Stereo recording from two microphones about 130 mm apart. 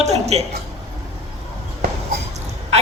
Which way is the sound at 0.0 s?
55° right (ahead or behind).